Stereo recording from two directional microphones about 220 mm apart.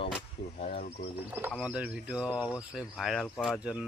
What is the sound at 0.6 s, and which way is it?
Speech, 30° left (ahead or behind).